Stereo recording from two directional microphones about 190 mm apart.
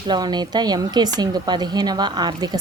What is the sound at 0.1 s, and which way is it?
Speech, 20° right (ahead or behind).